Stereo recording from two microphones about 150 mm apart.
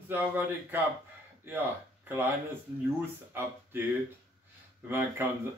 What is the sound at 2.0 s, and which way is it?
Speech, 15° right (ahead or behind).